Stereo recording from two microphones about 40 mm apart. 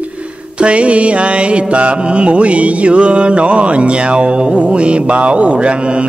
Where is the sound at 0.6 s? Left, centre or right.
Right.